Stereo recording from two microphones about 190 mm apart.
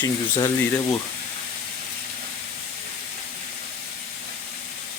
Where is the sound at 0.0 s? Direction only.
25° left (ahead or behind).